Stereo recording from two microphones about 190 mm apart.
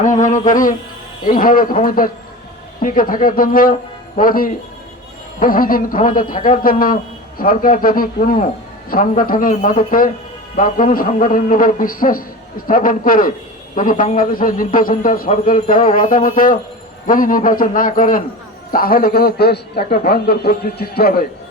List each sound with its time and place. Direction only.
0.0 s a man's voice: 40° left (ahead or behind)